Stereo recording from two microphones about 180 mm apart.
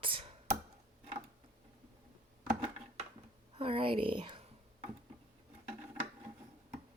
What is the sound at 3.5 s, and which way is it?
Speech, 30° right (ahead or behind).